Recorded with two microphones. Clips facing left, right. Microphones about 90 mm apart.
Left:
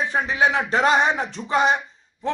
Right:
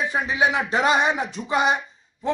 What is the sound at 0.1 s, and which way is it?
A man's voice, 5° right (ahead or behind).